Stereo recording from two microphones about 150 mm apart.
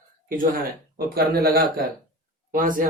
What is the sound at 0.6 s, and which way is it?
Speech, 90° right.